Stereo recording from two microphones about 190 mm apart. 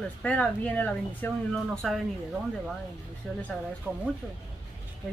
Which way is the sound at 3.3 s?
5° left (ahead or behind).